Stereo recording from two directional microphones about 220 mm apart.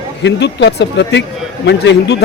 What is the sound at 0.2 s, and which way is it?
A man's voice, 50° left (ahead or behind).